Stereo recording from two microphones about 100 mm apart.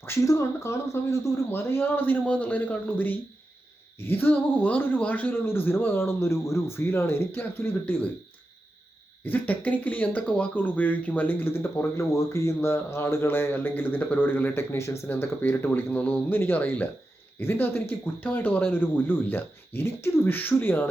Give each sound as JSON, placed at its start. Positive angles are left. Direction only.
{"t": 0.0, "sound": "speech", "side_deg": 30}
{"t": 9.2, "sound": "speech", "side_deg": 15}